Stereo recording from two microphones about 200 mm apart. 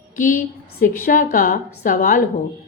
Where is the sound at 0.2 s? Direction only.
40° left (ahead or behind).